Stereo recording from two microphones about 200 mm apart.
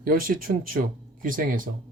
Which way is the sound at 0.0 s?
45° right (ahead or behind).